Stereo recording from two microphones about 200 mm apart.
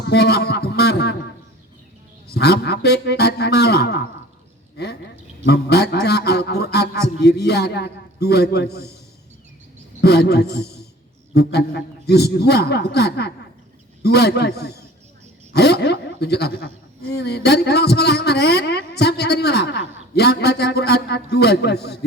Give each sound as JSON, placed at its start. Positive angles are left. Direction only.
{"t": 0.1, "sound": "a sound", "side_deg": 55}
{"t": 2.3, "sound": "a man's voice", "side_deg": 55}
{"t": 5.5, "sound": "a man's voice", "side_deg": 55}
{"t": 10.0, "sound": "a man's voice", "side_deg": 55}